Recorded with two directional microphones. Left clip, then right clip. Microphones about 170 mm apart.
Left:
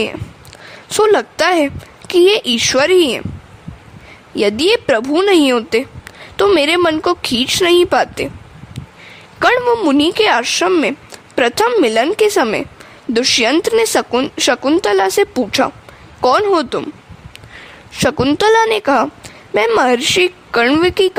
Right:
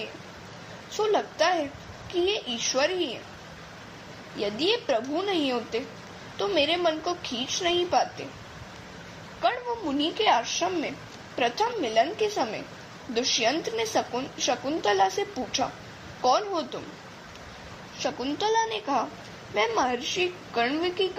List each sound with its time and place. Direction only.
0.9 s speech: 60° left (ahead or behind)
4.4 s speech: 60° left (ahead or behind)
9.4 s speech: 65° left (ahead or behind)
18.0 s speech: 70° left (ahead or behind)